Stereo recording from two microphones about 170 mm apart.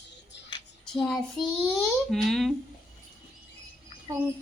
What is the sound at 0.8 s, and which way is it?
Child singing, 5° left (ahead or behind).